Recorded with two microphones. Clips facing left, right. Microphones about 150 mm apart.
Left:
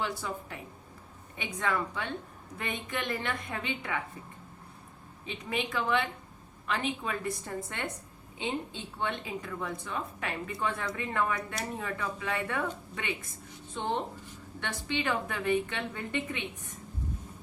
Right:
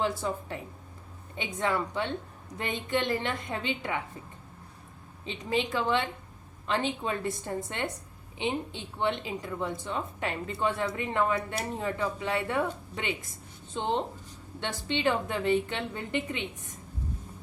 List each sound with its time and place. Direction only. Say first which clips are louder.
0.0 s a woman's voice: right 5 dB; 30° right (ahead or behind)
5.2 s a woman's voice: right 4 dB; 30° right (ahead or behind)
13.7 s a woman's voice: right 3 dB; 20° right (ahead or behind)